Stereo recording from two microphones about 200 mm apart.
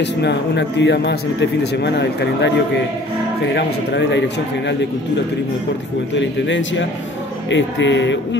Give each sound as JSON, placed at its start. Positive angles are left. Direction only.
{"t": 0.0, "sound": "speech", "side_deg": 60}
{"t": 6.1, "sound": "speech", "side_deg": 65}